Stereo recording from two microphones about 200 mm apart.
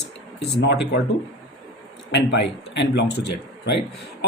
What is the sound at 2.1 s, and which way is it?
A man's voice, 60° left (ahead or behind).